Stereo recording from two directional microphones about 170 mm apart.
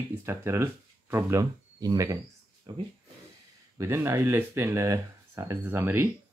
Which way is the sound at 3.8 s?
15° right (ahead or behind).